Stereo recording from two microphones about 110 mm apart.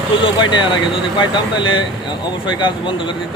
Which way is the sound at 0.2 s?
45° left (ahead or behind).